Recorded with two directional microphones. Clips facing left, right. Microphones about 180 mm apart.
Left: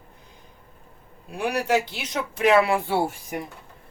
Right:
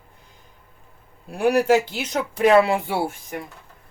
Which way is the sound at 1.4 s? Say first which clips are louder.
Right 7 dB; 50° right (ahead or behind).